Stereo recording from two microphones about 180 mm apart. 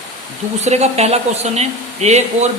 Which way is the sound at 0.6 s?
35° right (ahead or behind).